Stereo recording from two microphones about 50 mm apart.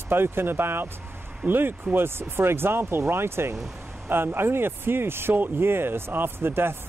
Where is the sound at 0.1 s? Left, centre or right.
Right.